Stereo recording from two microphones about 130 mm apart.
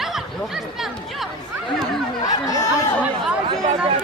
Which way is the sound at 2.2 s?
30° left (ahead or behind).